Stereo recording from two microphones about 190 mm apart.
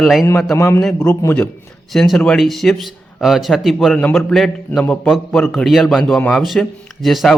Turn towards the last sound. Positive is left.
turn(degrees=0)  # may be behind; listen again after turning